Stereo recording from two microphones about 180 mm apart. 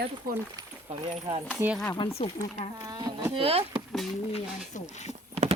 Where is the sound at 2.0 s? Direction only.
30° left (ahead or behind).